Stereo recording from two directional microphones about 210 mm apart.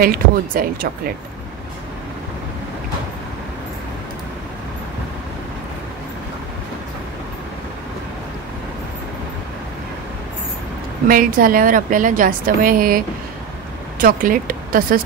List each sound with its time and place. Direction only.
0.0 s speech: 45° right (ahead or behind)
11.1 s a woman's voice: 40° right (ahead or behind)